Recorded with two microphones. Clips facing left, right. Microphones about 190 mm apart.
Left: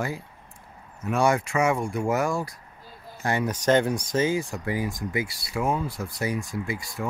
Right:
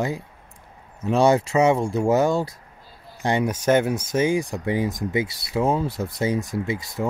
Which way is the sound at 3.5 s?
10° right (ahead or behind).